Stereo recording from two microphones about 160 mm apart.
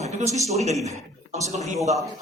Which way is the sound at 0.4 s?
45° right (ahead or behind).